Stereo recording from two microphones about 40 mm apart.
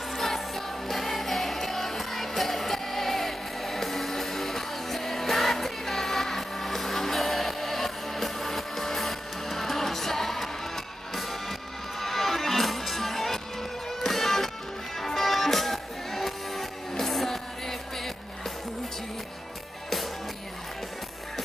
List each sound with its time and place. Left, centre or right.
0.1 s music: centre
12.0 s music: centre